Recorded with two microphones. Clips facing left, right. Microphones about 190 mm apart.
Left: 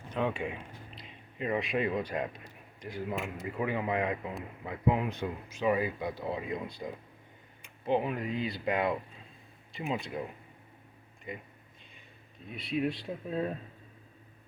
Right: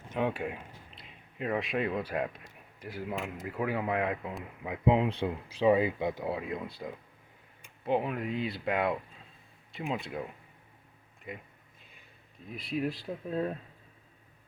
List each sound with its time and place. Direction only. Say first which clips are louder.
0.2 s speech: right 1 dB; 10° right (ahead or behind)
4.6 s speech: right 3 dB; 20° right (ahead or behind)
6.2 s speech: right 1 dB; 5° right (ahead or behind)
11.3 s speech: left 1 dB; centre (ahead or behind)
12.5 s speech: left 1 dB; centre (ahead or behind)